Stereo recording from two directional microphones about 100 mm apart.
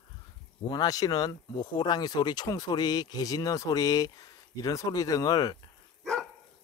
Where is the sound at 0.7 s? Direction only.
40° left (ahead or behind).